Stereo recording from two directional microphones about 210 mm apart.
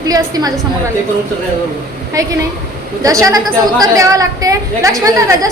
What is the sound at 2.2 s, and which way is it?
A woman's voice, 15° right (ahead or behind).